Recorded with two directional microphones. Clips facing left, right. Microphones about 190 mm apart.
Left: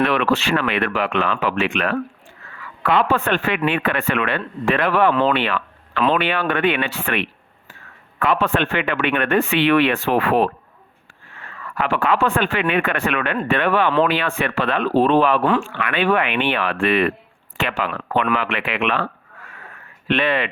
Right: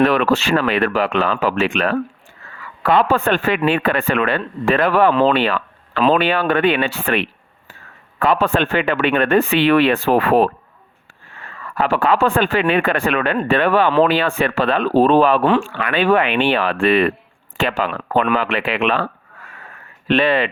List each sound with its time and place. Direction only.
0.0 s speech: 40° right (ahead or behind)
20.1 s speech: 35° right (ahead or behind)